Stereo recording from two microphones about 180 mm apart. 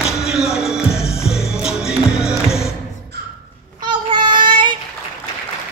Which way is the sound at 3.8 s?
25° right (ahead or behind).